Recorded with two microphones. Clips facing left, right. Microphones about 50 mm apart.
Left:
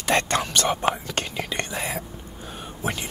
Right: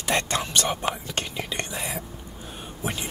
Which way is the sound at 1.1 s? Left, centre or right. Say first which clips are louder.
Left 2 dB; left.